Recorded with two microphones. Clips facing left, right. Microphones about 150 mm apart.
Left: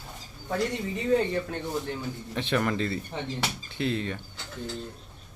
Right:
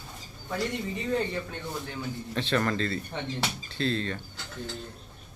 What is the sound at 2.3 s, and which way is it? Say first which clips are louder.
A man's voice: even; 15° left (ahead or behind).